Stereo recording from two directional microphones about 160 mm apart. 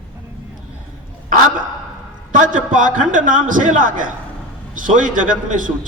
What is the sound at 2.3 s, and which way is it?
A man's voice, 55° right (ahead or behind).